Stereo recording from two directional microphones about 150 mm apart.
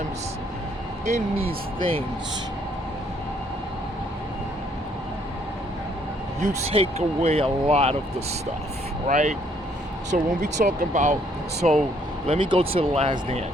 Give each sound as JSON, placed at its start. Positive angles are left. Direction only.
{"t": 1.0, "sound": "speech", "side_deg": -45}
{"t": 6.7, "sound": "speech", "side_deg": -45}
{"t": 9.0, "sound": "speech", "side_deg": -55}
{"t": 12.3, "sound": "speech", "side_deg": -35}